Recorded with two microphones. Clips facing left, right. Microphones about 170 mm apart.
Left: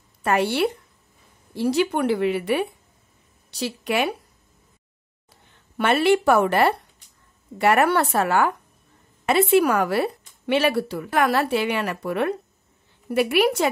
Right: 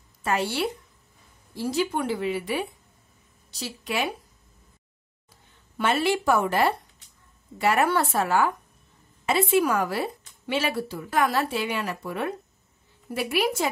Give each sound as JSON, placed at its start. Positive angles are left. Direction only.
{"t": 0.2, "sound": "a woman's voice", "side_deg": 60}
{"t": 5.8, "sound": "speech", "side_deg": 65}